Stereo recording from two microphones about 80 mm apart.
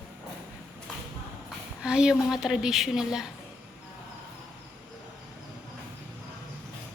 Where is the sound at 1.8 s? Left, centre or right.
Centre.